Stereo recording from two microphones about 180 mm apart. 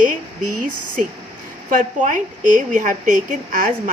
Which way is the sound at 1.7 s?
45° right (ahead or behind).